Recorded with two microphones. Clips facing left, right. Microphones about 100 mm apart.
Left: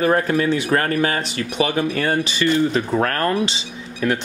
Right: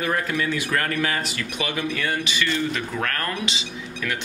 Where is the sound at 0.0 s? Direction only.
40° left (ahead or behind).